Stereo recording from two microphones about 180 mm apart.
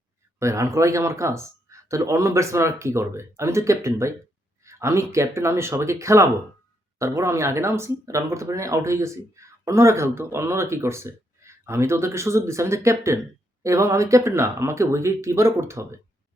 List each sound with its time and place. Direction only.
0.3 s speech: 15° right (ahead or behind)